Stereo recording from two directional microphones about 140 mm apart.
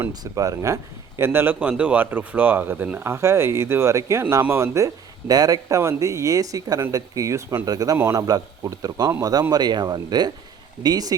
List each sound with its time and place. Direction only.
0.1 s speech: 25° right (ahead or behind)